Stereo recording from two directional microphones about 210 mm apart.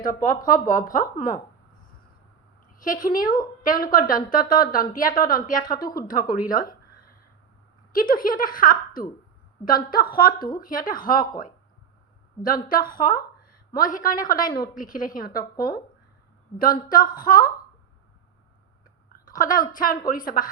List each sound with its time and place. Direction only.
0.0 s a woman's voice: 40° left (ahead or behind)
2.7 s a woman's voice: 40° left (ahead or behind)
6.4 s a sound: 40° left (ahead or behind)
7.9 s a woman's voice: 40° left (ahead or behind)
12.9 s a woman's voice: 40° left (ahead or behind)
16.9 s a woman's voice: 40° left (ahead or behind)
19.1 s a sound: 40° left (ahead or behind)
19.7 s a woman's voice: 40° left (ahead or behind)